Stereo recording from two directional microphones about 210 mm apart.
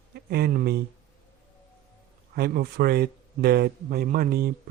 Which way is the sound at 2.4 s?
45° right (ahead or behind).